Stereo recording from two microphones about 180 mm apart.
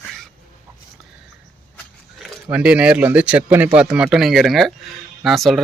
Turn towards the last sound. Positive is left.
turn(degrees=0)  # may be behind; listen again after turning